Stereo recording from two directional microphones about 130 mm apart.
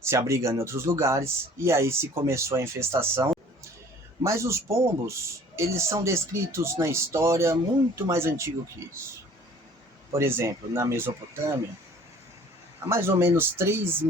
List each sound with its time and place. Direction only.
0.0 s speech: 20° right (ahead or behind)
10.2 s speech: 20° right (ahead or behind)
12.9 s speech: 20° right (ahead or behind)